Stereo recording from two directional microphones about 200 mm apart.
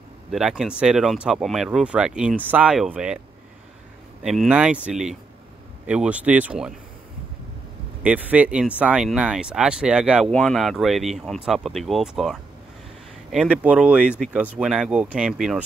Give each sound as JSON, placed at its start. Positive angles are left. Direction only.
{"t": 0.3, "sound": "speech", "side_deg": 0}
{"t": 4.2, "sound": "speech", "side_deg": -5}
{"t": 8.0, "sound": "speech", "side_deg": -5}